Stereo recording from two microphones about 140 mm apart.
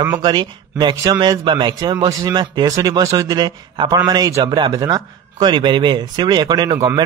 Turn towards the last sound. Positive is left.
turn(degrees=-25)  # may be behind; listen again after turning